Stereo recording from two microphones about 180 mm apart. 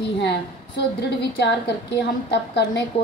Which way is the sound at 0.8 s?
70° left (ahead or behind).